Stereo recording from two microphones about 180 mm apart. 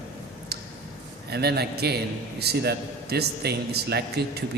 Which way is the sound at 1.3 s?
65° right (ahead or behind).